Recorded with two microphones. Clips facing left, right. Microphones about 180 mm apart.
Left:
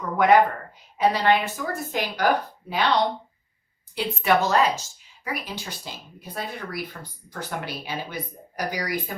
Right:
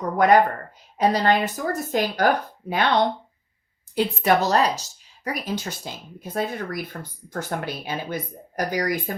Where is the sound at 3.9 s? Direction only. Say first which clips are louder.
Right 2 dB; 40° right (ahead or behind).